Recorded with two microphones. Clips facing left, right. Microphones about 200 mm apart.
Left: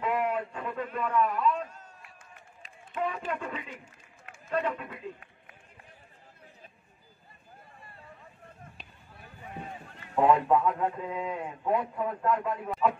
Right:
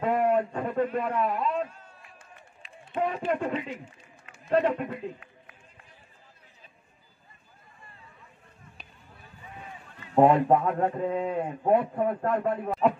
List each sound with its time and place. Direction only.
0.0 s a sound: 45° right (ahead or behind)
2.9 s a man's voice: 40° right (ahead or behind)
9.5 s run: 40° left (ahead or behind)
10.1 s a man's voice: 45° right (ahead or behind)